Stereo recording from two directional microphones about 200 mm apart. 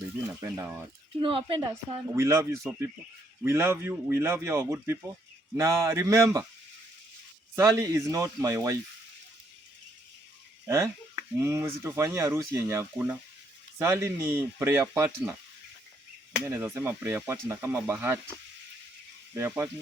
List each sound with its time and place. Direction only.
0.4 s speech: 15° right (ahead or behind)
1.2 s a woman's voice: 25° right (ahead or behind)
2.1 s speech: 15° right (ahead or behind)
7.5 s speech: 15° right (ahead or behind)
10.7 s speech: 15° right (ahead or behind)
16.5 s speech: 15° right (ahead or behind)
19.3 s speech: 10° right (ahead or behind)